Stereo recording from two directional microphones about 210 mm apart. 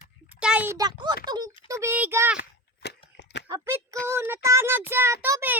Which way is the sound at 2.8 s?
55° left (ahead or behind).